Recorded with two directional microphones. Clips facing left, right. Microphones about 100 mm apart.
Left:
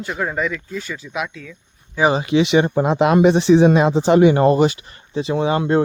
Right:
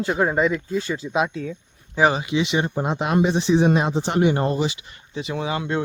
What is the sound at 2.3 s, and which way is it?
Speech, 75° left (ahead or behind).